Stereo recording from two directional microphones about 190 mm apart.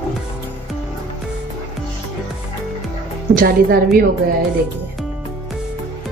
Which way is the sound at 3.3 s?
50° right (ahead or behind).